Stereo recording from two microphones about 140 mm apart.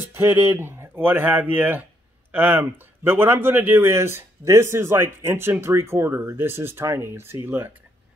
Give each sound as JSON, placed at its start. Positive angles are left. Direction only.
{"t": 0.1, "sound": "speech", "side_deg": -20}